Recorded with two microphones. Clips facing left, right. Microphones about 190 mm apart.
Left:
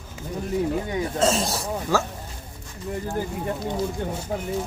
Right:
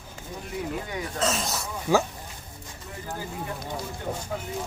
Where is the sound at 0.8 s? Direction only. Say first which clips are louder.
Left 6 dB; 30° left (ahead or behind).